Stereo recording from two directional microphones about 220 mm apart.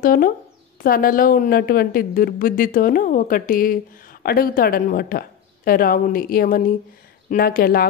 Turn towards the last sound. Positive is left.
turn(degrees=40)  # may be behind; listen again after turning